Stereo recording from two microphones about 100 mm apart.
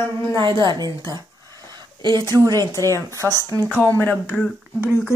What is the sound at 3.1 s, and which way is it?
Speech, 30° right (ahead or behind).